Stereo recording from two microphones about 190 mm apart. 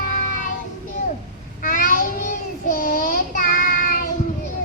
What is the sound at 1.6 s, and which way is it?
Child singing, 45° left (ahead or behind).